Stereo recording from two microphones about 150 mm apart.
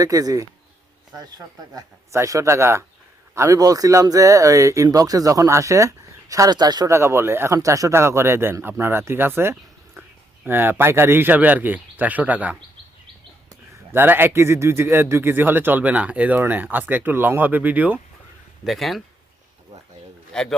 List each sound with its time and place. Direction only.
0.0 s a man's voice: 25° right (ahead or behind)
18.6 s speech: centre (ahead or behind)
20.3 s a man's voice: 5° left (ahead or behind)